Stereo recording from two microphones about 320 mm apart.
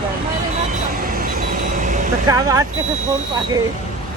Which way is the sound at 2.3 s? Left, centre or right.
Centre.